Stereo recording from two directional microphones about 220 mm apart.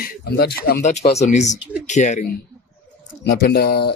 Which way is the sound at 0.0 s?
45° left (ahead or behind).